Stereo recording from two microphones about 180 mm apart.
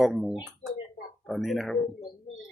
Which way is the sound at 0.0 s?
Centre (ahead or behind).